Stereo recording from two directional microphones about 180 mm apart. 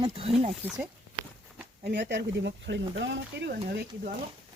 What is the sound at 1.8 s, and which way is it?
Speech, 70° right (ahead or behind).